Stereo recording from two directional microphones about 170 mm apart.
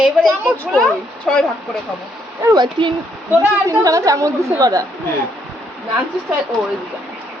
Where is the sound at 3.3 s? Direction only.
10° right (ahead or behind).